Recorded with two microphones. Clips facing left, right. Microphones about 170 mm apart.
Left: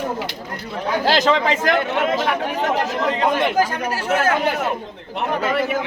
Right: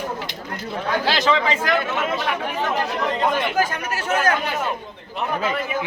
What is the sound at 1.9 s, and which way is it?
Speech, 75° left (ahead or behind).